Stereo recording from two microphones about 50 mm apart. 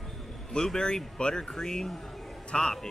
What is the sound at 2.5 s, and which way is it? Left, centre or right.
Speech, centre.